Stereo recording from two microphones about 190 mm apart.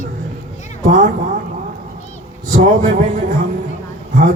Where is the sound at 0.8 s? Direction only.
40° right (ahead or behind).